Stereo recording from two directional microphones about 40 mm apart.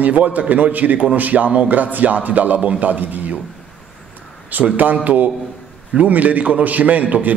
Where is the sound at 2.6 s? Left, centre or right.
Right.